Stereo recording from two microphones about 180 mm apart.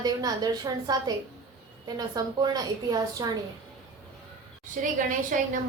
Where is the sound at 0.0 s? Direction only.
20° right (ahead or behind).